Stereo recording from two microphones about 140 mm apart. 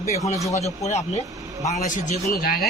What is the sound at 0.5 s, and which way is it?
Speech, 50° left (ahead or behind).